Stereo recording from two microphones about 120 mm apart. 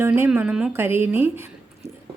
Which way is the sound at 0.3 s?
10° right (ahead or behind).